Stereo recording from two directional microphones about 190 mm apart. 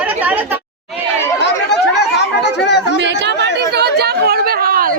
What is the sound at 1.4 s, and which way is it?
Chatter, 65° left (ahead or behind).